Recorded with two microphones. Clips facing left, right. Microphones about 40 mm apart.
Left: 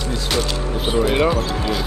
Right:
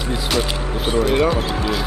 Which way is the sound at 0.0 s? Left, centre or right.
Centre.